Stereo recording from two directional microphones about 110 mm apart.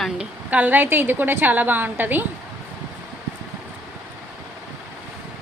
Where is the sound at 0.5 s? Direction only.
15° right (ahead or behind).